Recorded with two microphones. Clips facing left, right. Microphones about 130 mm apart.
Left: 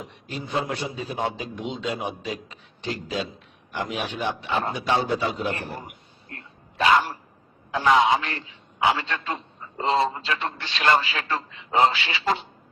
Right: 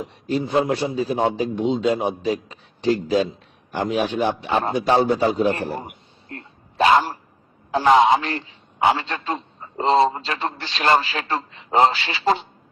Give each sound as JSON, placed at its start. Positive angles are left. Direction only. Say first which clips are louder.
{"t": 0.0, "sound": "a man's voice", "louder": "right 11 dB", "side_deg": -35}